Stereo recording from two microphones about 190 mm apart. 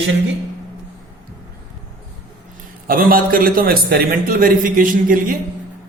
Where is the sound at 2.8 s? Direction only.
50° right (ahead or behind).